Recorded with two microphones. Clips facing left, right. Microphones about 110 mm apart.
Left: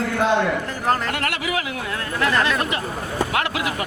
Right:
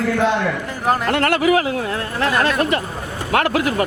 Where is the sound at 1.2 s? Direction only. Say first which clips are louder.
Right 9 dB; 40° right (ahead or behind).